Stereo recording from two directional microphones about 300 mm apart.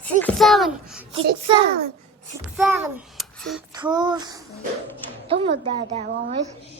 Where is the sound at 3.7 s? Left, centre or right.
Centre.